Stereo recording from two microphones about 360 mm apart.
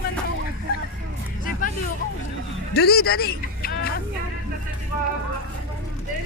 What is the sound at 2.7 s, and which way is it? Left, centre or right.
Music, left.